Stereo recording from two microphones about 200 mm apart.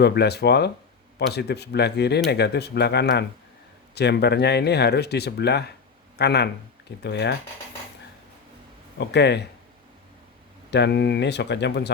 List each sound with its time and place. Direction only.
0.0 s speech: 55° left (ahead or behind)
9.0 s speech: 60° left (ahead or behind)
10.7 s speech: 60° left (ahead or behind)